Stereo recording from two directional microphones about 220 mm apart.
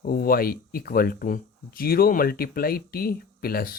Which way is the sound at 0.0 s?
40° left (ahead or behind).